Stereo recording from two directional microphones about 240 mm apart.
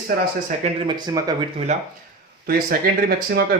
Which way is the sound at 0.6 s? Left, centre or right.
Centre.